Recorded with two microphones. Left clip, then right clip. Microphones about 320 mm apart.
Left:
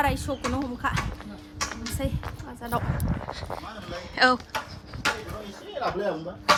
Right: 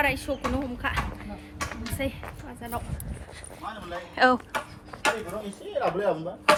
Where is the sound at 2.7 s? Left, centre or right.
Centre.